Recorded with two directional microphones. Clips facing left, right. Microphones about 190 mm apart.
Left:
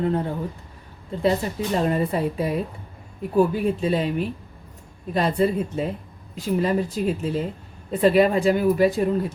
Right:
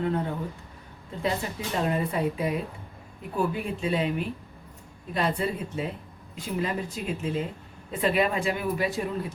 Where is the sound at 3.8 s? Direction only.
35° left (ahead or behind).